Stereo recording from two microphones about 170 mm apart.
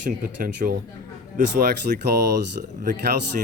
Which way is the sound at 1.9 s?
50° right (ahead or behind).